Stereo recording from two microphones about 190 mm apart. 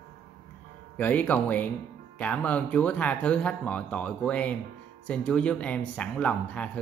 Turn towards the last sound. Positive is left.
turn(degrees=5)  # may be behind; listen again after turning